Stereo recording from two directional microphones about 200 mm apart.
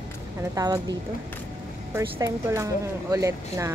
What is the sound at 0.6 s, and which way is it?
Speech, 20° right (ahead or behind).